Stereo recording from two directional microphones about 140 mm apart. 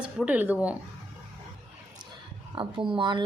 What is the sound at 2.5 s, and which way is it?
Speech, 35° right (ahead or behind).